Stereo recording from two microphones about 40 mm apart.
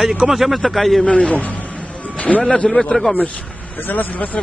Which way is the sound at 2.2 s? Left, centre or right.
Left.